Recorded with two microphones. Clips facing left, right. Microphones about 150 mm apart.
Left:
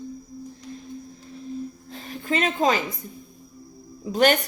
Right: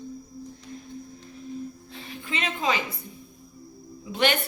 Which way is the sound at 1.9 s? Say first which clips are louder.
Left 7 dB; 40° left (ahead or behind).